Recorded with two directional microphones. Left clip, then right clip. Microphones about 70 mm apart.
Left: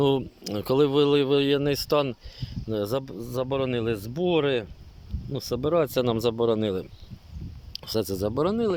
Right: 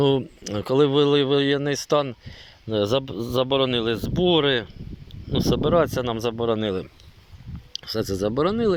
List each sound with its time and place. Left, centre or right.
0.0 s speech: left
2.4 s a sound: left
2.8 s speech: centre; by 5.8 s left
5.8 s speech: left